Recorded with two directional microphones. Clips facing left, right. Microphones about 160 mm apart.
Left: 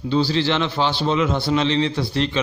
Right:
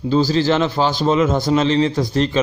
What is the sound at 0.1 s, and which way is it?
A man's voice, 40° right (ahead or behind).